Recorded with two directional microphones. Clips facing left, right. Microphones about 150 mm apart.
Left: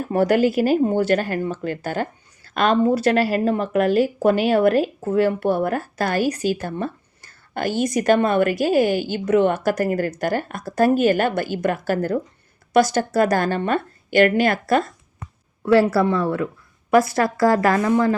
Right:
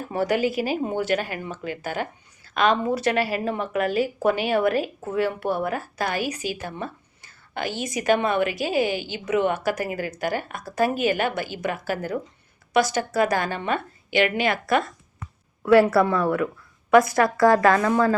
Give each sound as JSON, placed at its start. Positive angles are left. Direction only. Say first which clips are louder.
{"t": 0.1, "sound": "a woman's voice", "louder": "left 6 dB", "side_deg": 55}
{"t": 17.4, "sound": "a woman's voice", "louder": "even", "side_deg": -25}
{"t": 17.7, "sound": "a woman's voice", "louder": "left 2 dB", "side_deg": 25}